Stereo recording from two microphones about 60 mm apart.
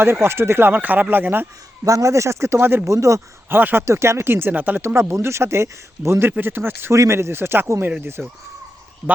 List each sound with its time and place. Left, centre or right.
0.0 s speech: right
1.8 s speech: right
2.8 s speech: right
3.5 s speech: right
3.8 s speech: right
5.1 s speech: right
6.9 s speech: right
8.2 s speech: right
9.0 s a man's voice: centre